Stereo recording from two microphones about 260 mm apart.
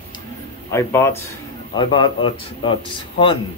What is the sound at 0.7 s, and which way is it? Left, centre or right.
Speech, centre.